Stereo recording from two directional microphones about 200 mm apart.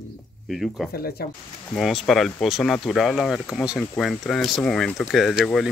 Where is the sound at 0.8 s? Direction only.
Centre (ahead or behind).